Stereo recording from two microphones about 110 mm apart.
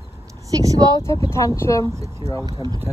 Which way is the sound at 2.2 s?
40° right (ahead or behind).